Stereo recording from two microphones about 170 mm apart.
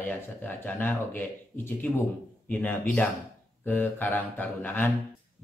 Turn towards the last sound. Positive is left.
turn(degrees=10)  # may be behind; listen again after turning